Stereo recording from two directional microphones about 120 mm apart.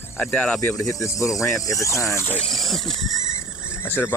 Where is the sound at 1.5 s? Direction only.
30° left (ahead or behind).